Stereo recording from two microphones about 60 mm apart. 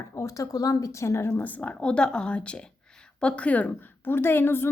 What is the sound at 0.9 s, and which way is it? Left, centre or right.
Speech, left.